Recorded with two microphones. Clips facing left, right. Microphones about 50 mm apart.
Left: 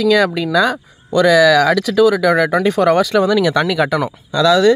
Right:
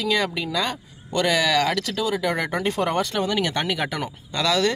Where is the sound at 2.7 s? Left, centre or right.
Left.